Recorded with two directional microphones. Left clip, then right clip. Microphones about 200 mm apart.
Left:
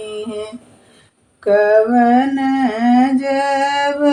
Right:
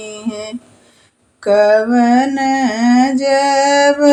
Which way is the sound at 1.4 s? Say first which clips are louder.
Right 1 dB; 30° right (ahead or behind).